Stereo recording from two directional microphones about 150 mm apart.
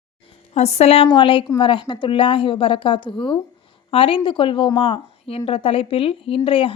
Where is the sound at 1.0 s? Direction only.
30° left (ahead or behind).